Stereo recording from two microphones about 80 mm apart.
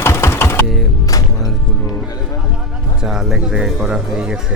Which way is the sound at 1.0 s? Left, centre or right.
Left.